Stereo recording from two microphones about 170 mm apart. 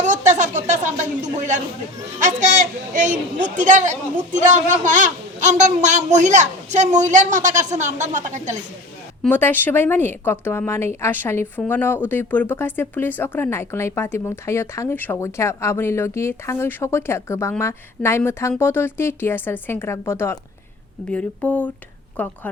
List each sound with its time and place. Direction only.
0.0 s a woman's voice: 45° right (ahead or behind)
9.2 s speech: 10° left (ahead or behind)